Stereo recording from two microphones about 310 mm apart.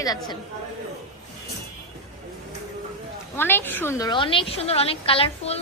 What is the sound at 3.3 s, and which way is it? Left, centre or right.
A woman's voice, centre.